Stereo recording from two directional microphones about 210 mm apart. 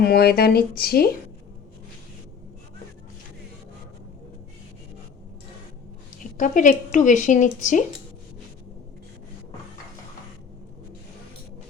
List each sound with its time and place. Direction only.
0.0 s speech: 50° left (ahead or behind)
6.3 s speech: 40° left (ahead or behind)